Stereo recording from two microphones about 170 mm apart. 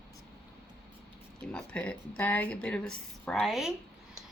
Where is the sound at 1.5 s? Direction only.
5° left (ahead or behind).